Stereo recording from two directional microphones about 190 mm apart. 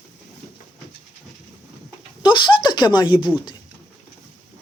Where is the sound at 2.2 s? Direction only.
25° left (ahead or behind).